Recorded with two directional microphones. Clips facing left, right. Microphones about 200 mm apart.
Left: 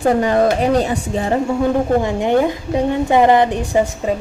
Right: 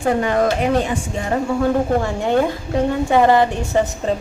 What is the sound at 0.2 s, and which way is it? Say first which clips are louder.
Speech: left 3 dB; 35° left (ahead or behind).